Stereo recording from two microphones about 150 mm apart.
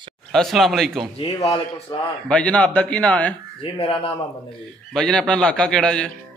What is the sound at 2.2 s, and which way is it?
A man's voice, 10° left (ahead or behind).